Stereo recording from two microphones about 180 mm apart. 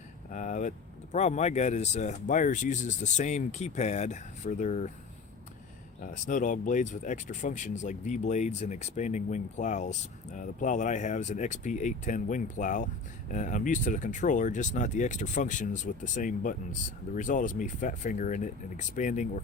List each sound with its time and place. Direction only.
0.3 s vehicle: 45° left (ahead or behind)
1.1 s speech: 40° left (ahead or behind)
6.0 s speech: 45° left (ahead or behind)